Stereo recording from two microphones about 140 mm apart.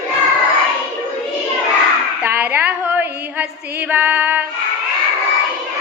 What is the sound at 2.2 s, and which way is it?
Female singing, 10° right (ahead or behind).